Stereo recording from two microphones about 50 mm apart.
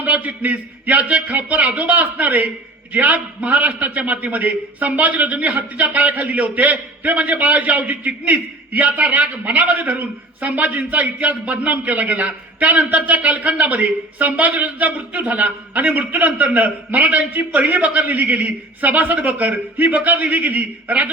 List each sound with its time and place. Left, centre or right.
0.0 s a man's voice: right